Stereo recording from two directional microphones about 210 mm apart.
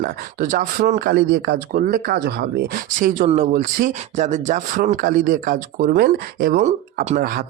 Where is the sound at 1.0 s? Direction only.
50° right (ahead or behind).